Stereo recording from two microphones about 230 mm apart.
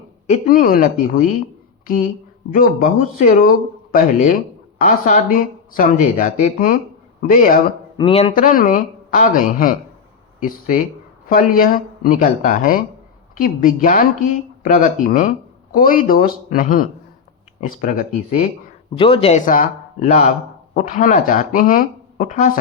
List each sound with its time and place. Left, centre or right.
0.3 s speech: left
2.5 s speech: left
7.9 s speech: left
18.9 s speech: left